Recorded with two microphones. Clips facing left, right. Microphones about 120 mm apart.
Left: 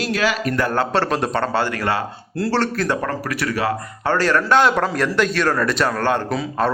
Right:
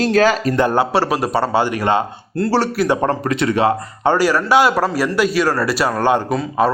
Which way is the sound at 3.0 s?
30° right (ahead or behind).